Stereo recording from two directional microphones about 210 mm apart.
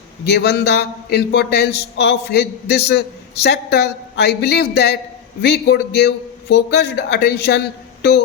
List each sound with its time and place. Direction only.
0.3 s a man's voice: 50° left (ahead or behind)